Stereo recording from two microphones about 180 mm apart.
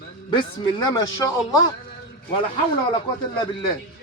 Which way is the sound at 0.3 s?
25° left (ahead or behind).